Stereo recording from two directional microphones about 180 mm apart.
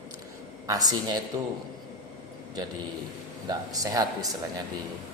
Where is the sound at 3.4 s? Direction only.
20° right (ahead or behind).